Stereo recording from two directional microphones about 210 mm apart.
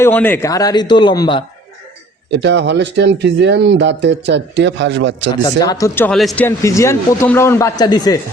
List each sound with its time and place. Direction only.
0.0 s a man's voice: 10° left (ahead or behind)
2.3 s speech: 55° right (ahead or behind)
5.5 s a man's voice: 15° left (ahead or behind)